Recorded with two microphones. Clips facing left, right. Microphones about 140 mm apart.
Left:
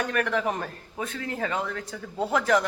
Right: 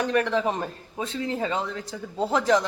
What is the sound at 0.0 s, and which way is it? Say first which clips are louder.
Speech: right 3 dB; 25° right (ahead or behind).